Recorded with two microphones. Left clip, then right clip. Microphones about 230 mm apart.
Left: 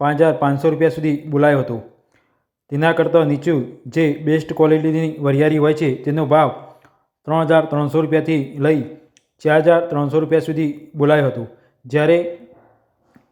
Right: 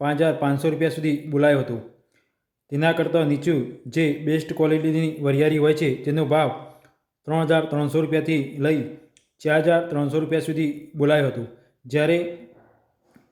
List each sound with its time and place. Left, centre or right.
0.0 s a man's voice: centre